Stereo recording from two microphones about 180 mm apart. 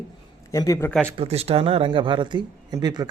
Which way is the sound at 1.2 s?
35° right (ahead or behind).